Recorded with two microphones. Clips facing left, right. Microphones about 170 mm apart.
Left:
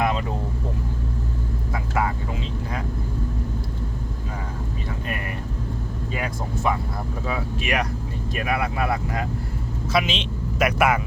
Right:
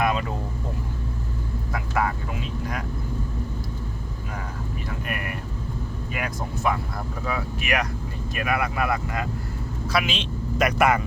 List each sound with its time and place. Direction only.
0.0 s vehicle: 25° left (ahead or behind)
1.7 s vehicle: 25° left (ahead or behind)
6.1 s vehicle: 25° left (ahead or behind)
7.3 s speech: 25° left (ahead or behind)
10.6 s speech: 5° left (ahead or behind)